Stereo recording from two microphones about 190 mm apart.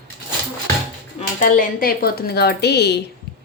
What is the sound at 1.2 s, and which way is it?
Speech, 45° left (ahead or behind).